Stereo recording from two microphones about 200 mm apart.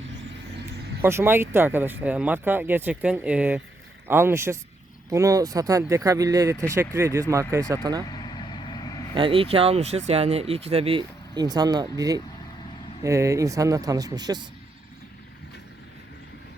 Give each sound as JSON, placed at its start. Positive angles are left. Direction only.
{"t": 1.0, "sound": "speech", "side_deg": -10}
{"t": 8.0, "sound": "vehicle", "side_deg": 20}
{"t": 9.1, "sound": "speech", "side_deg": -25}